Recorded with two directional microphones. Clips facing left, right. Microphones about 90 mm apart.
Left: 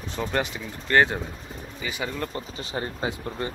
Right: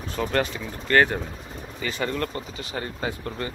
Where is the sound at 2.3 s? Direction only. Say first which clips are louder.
Left 1 dB; 25° left (ahead or behind).